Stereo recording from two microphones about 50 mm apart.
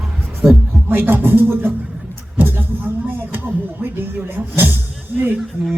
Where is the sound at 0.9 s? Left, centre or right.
Right.